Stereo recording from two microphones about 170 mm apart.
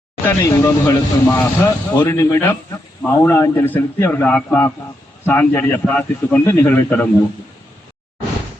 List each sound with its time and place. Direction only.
0.3 s speech: 15° left (ahead or behind)